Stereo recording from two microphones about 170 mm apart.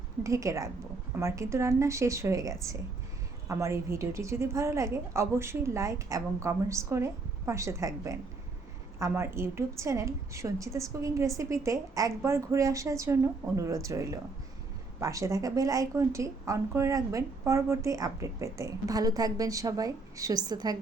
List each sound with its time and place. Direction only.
0.2 s a woman's voice: 20° right (ahead or behind)